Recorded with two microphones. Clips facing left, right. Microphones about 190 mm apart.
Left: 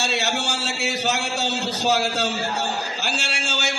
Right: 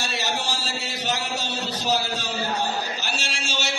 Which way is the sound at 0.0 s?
70° left (ahead or behind).